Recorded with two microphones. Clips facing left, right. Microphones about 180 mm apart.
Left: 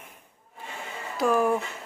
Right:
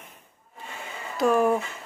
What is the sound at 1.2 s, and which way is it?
Speech, centre (ahead or behind).